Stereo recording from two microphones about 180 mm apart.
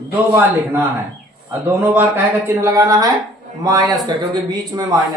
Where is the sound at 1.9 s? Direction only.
10° right (ahead or behind).